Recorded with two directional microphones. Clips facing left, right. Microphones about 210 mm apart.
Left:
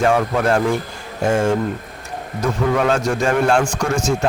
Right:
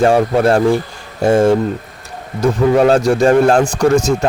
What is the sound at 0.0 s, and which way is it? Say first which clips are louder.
A man's voice: right 5 dB; 35° right (ahead or behind).